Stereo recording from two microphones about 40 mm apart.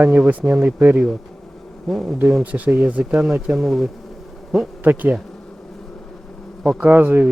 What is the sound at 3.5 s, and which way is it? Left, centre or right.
Bee, centre.